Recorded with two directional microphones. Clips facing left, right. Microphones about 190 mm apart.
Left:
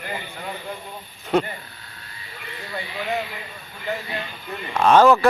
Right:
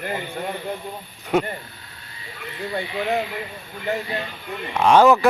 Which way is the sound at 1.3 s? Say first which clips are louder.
Even; 10° right (ahead or behind).